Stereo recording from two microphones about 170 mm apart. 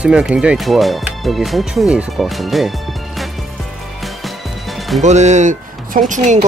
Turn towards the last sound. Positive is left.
turn(degrees=-45)  # may be behind; listen again after turning